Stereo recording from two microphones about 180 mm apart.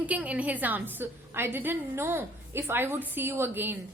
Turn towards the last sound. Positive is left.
turn(degrees=-10)  # may be behind; listen again after turning